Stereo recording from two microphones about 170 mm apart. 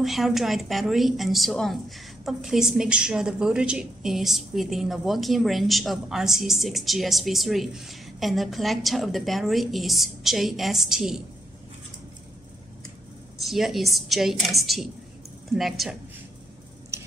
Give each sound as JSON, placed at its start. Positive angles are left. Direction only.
{"t": 0.0, "sound": "a woman's voice", "side_deg": 0}
{"t": 13.4, "sound": "a woman's voice", "side_deg": 0}
{"t": 16.9, "sound": "a sound", "side_deg": -15}